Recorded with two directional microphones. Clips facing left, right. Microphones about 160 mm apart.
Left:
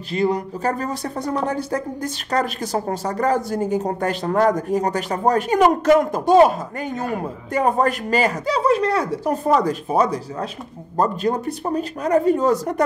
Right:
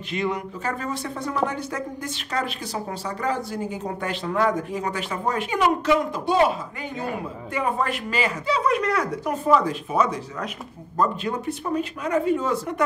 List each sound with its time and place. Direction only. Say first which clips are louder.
0.1 s speech: left 6 dB; 35° left (ahead or behind)
7.5 s speech: left 6 dB; 40° left (ahead or behind)